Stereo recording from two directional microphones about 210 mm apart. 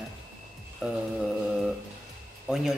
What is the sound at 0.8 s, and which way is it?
Speech, 5° right (ahead or behind).